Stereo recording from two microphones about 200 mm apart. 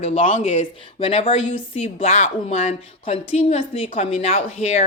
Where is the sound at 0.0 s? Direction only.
35° left (ahead or behind).